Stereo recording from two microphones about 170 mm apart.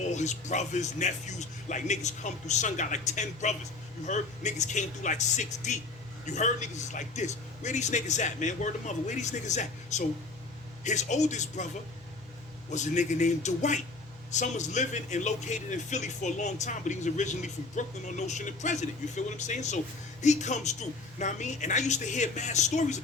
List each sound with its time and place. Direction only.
0.0 s speech: 45° left (ahead or behind)
12.7 s speech: 45° left (ahead or behind)